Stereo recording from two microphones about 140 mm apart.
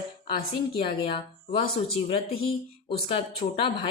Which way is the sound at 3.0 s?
40° left (ahead or behind).